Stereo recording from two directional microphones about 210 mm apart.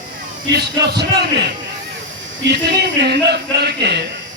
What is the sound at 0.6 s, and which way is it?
Speech, 50° right (ahead or behind).